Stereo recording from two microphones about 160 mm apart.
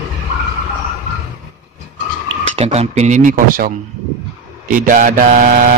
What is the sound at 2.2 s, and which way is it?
Speech, 40° right (ahead or behind).